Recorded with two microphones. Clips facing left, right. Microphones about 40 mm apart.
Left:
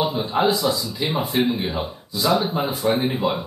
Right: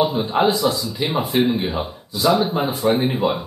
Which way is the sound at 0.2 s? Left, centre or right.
Centre.